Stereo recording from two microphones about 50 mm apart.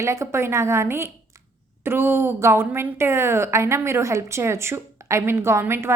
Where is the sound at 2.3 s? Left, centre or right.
Right.